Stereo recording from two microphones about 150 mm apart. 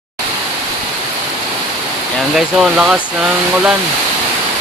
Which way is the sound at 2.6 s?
5° right (ahead or behind).